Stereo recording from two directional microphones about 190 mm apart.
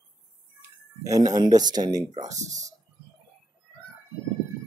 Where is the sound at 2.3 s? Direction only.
40° right (ahead or behind).